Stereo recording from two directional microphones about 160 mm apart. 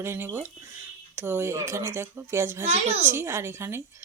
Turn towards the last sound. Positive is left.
turn(degrees=-15)  # may be behind; listen again after turning